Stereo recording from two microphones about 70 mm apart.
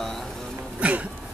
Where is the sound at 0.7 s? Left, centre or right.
Right.